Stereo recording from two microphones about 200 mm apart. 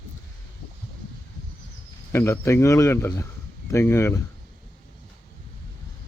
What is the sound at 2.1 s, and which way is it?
Speech, 15° left (ahead or behind).